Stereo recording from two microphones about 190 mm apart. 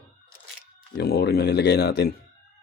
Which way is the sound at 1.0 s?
55° left (ahead or behind).